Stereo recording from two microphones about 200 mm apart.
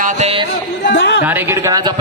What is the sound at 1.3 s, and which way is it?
Speech, 10° right (ahead or behind).